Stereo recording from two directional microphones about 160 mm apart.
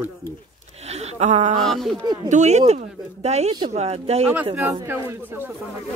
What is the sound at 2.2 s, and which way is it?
Speech, 45° right (ahead or behind).